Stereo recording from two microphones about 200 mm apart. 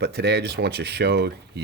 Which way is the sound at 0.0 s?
55° right (ahead or behind).